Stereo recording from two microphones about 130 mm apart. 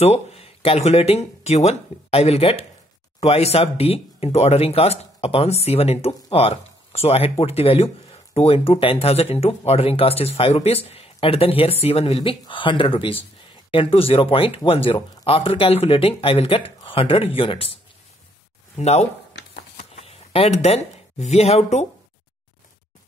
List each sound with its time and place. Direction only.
0.0 s speech: 50° left (ahead or behind)
18.8 s speech: 60° left (ahead or behind)